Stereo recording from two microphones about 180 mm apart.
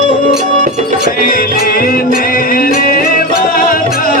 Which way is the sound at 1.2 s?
50° left (ahead or behind).